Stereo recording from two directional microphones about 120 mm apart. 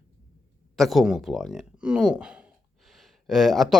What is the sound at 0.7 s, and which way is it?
Speech, centre (ahead or behind).